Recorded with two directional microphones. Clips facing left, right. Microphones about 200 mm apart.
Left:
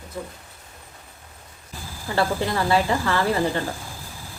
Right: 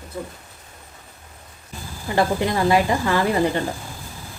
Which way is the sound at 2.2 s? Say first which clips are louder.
Right 3 dB; 15° right (ahead or behind).